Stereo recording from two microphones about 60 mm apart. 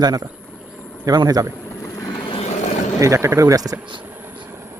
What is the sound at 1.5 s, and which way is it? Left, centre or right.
Boat, left.